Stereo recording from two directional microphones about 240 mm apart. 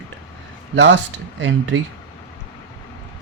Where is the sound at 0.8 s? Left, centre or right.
Right.